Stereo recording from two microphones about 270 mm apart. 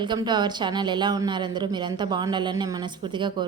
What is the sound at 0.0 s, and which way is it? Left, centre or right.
A woman's voice, centre.